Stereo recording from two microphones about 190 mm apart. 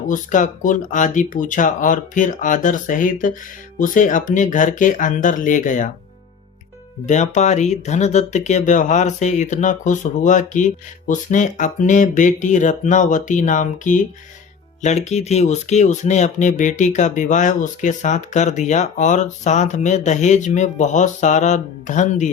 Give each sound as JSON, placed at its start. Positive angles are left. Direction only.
{"t": 0.1, "sound": "speech", "side_deg": 40}
{"t": 7.0, "sound": "speech", "side_deg": 40}